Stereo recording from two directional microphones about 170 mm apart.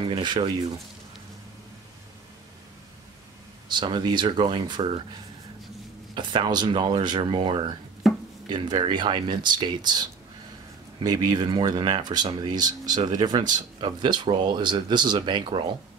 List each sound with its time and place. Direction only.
0.0 s speech: 30° right (ahead or behind)
3.6 s speech: 25° right (ahead or behind)
6.1 s speech: 25° right (ahead or behind)
11.1 s speech: 25° right (ahead or behind)